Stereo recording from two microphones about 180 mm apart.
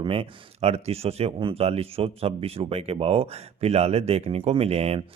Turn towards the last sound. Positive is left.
turn(degrees=-35)  # may be behind; listen again after turning